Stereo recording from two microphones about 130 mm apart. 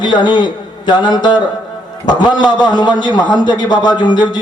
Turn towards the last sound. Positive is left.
turn(degrees=35)  # may be behind; listen again after turning